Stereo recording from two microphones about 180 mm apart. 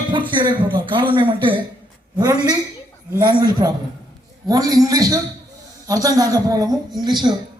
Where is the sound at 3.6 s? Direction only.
20° right (ahead or behind).